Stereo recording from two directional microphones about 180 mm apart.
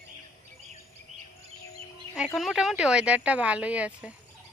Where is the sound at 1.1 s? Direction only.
40° right (ahead or behind).